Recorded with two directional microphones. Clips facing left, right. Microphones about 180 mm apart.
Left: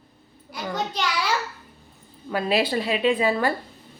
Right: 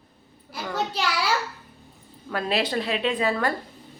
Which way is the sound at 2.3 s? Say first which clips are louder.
Left 3 dB; 5° left (ahead or behind).